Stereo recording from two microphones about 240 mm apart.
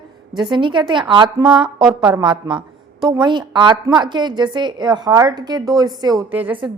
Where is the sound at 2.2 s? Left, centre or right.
Centre.